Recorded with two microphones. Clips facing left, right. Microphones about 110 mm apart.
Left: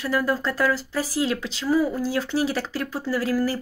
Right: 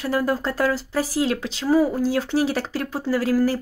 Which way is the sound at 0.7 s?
50° right (ahead or behind).